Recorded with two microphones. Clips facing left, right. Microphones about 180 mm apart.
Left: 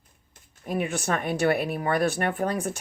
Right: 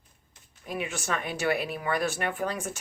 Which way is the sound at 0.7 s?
55° left (ahead or behind).